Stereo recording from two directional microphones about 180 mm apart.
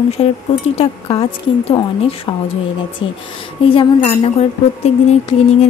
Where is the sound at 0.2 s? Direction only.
30° left (ahead or behind).